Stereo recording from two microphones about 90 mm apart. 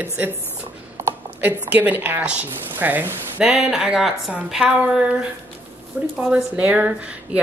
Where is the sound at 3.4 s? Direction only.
5° right (ahead or behind).